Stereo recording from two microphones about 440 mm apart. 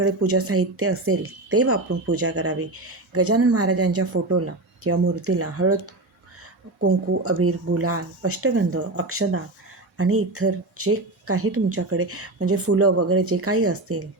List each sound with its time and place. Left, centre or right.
0.0 s speech: right